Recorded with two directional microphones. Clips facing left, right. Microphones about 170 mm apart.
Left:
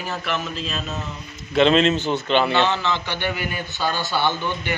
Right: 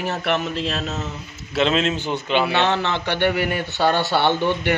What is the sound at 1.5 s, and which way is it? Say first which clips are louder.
Speech: left 3 dB; 5° right (ahead or behind).